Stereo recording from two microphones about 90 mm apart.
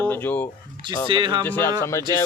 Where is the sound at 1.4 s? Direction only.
20° left (ahead or behind).